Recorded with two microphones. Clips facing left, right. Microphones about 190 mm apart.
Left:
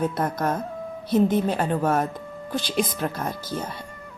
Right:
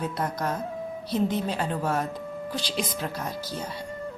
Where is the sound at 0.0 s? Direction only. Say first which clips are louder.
Left 5 dB; 50° left (ahead or behind).